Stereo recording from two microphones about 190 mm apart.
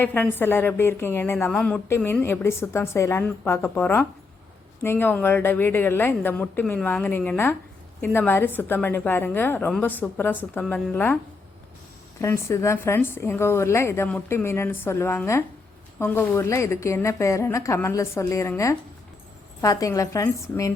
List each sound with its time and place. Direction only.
0.0 s a woman's voice: 10° left (ahead or behind)
12.2 s a woman's voice: 15° left (ahead or behind)